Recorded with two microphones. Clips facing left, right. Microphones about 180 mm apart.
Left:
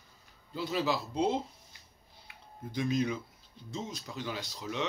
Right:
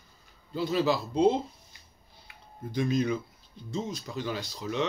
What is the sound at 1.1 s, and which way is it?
Speech, 20° right (ahead or behind).